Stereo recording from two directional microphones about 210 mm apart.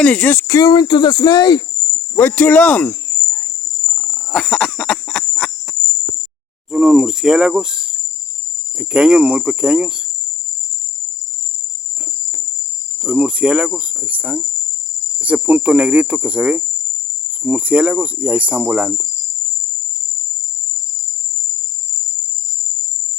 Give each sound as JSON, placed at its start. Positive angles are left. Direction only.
{"t": 0.0, "sound": "speech", "side_deg": 5}
{"t": 2.1, "sound": "speech", "side_deg": 10}
{"t": 3.8, "sound": "a sound", "side_deg": 5}
{"t": 6.7, "sound": "speech", "side_deg": 0}
{"t": 13.0, "sound": "speech", "side_deg": -5}